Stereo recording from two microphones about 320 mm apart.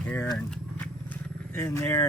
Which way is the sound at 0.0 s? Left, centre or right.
Centre.